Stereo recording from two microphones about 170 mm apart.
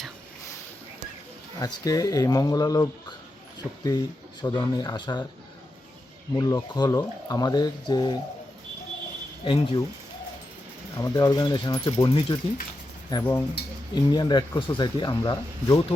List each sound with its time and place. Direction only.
1.5 s speech: 20° left (ahead or behind)
6.3 s speech: 20° left (ahead or behind)
9.4 s speech: 30° left (ahead or behind)
10.9 s speech: 20° left (ahead or behind)